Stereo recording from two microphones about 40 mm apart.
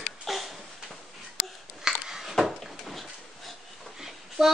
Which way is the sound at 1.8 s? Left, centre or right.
Centre.